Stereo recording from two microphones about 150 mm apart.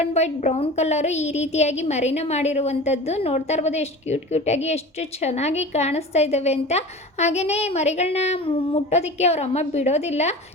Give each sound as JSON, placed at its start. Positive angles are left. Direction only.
{"t": 0.0, "sound": "a woman's voice", "side_deg": 50}